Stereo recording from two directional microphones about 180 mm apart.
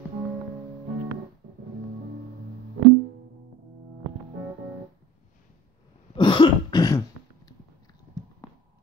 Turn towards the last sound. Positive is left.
turn(degrees=20)  # may be behind; listen again after turning